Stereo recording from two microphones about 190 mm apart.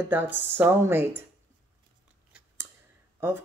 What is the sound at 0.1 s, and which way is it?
A woman's voice, 10° right (ahead or behind).